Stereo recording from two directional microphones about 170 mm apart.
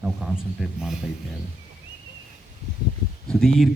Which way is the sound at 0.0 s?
5° right (ahead or behind).